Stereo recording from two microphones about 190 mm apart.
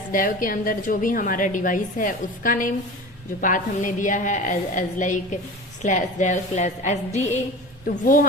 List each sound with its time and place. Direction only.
0.1 s a woman's voice: 45° left (ahead or behind)
7.9 s a woman's voice: 50° left (ahead or behind)